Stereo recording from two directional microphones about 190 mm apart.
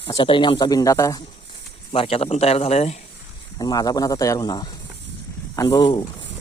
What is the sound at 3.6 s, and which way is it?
Speech, 20° left (ahead or behind).